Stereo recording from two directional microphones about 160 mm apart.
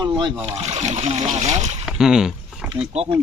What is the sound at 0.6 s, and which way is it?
Speech, 45° right (ahead or behind).